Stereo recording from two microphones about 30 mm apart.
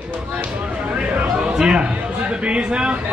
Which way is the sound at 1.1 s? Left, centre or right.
Right.